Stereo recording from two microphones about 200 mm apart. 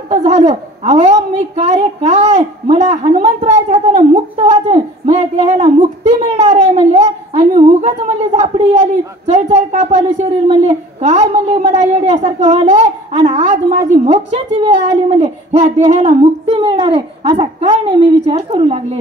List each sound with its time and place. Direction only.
0.1 s a woman's voice: 35° right (ahead or behind)